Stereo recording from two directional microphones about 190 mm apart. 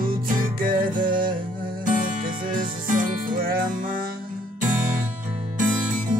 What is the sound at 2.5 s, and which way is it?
Music, 45° right (ahead or behind).